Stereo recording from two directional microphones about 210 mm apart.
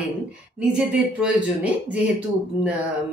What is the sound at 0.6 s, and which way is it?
A woman's voice, 5° right (ahead or behind).